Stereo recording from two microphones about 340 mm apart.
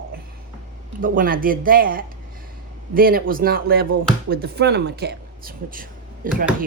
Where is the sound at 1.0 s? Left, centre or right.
Right.